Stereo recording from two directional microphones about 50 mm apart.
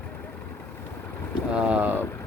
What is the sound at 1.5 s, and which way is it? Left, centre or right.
Vehicle, right.